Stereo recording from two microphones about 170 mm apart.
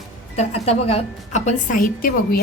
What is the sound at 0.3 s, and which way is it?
A woman's voice, 40° left (ahead or behind).